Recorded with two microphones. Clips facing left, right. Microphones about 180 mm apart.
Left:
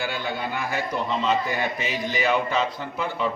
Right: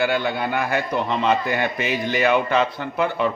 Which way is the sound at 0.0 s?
65° right (ahead or behind).